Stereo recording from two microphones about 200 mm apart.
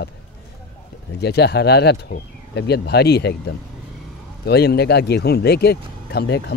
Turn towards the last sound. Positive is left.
turn(degrees=55)  # may be behind; listen again after turning